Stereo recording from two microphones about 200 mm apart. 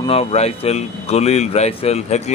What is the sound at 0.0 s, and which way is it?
Speech, 30° left (ahead or behind).